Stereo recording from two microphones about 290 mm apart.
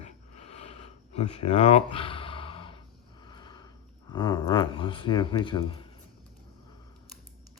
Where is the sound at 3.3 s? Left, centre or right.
Centre.